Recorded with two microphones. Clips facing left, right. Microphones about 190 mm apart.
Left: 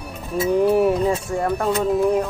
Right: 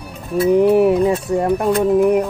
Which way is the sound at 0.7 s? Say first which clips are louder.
Right 4 dB; 20° right (ahead or behind).